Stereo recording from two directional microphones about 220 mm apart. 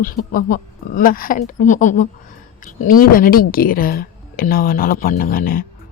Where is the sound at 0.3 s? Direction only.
40° left (ahead or behind).